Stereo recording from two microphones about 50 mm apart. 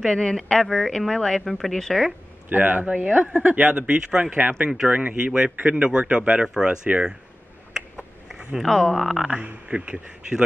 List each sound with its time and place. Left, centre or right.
0.0 s a woman's voice: centre
2.5 s speech: right; by 6.8 s centre
8.6 s a woman's voice: centre
9.0 s speech: centre
9.3 s speech: right